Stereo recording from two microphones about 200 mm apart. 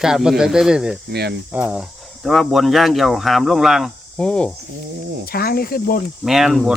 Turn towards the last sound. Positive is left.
turn(degrees=0)  # may be behind; listen again after turning